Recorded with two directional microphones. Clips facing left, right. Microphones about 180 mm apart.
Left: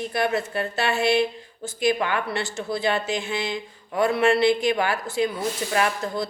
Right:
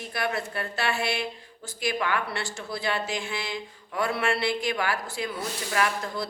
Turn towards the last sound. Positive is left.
turn(degrees=25)  # may be behind; listen again after turning